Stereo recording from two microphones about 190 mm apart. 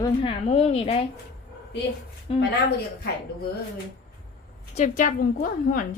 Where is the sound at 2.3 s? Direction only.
30° left (ahead or behind).